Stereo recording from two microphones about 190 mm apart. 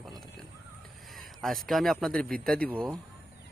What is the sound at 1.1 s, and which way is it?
A man's voice, centre (ahead or behind).